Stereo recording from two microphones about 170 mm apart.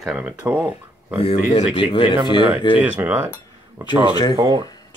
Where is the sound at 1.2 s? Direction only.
35° left (ahead or behind).